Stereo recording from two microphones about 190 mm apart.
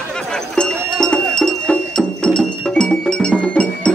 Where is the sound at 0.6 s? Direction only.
5° left (ahead or behind).